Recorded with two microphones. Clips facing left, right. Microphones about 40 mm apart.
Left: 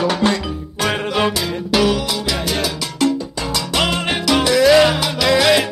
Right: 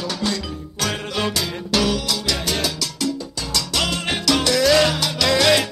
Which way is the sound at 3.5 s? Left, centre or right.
Left.